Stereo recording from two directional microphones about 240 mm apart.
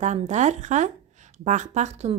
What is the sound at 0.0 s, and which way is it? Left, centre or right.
A woman's voice, right.